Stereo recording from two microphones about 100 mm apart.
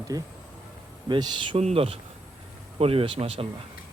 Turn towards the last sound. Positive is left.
turn(degrees=-65)  # may be behind; listen again after turning